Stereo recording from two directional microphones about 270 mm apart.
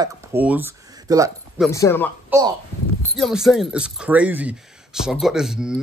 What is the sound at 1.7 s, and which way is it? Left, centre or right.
Speech, centre.